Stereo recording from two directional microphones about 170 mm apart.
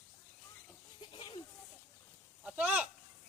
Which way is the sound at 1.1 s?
30° left (ahead or behind).